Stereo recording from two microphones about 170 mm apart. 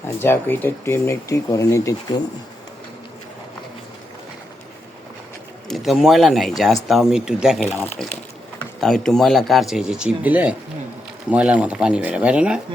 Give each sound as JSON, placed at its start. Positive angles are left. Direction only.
{"t": 0.2, "sound": "speech", "side_deg": 15}
{"t": 5.6, "sound": "speech", "side_deg": 0}
{"t": 8.8, "sound": "speech", "side_deg": 0}